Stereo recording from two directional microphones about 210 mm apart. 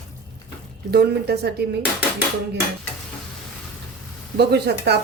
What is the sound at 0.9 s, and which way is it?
Speech, 50° right (ahead or behind).